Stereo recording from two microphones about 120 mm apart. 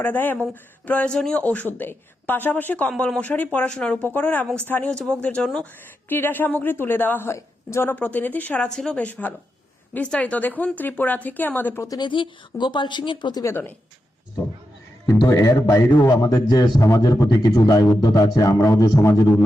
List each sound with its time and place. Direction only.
0.0 s a woman's voice: 15° left (ahead or behind)
11.9 s a man's voice: 40° left (ahead or behind)
13.4 s a woman's voice: 15° left (ahead or behind)
15.2 s a man's voice: 30° left (ahead or behind)